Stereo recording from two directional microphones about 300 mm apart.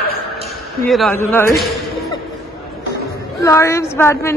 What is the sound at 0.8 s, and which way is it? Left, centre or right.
Speech, centre.